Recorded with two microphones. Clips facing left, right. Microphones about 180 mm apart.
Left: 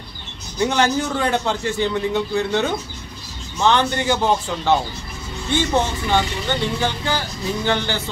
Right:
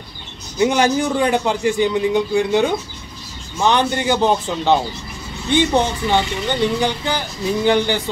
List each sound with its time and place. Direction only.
0.6 s a man's voice: 15° right (ahead or behind)